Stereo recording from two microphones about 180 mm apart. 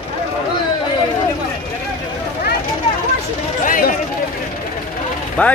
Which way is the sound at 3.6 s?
45° left (ahead or behind).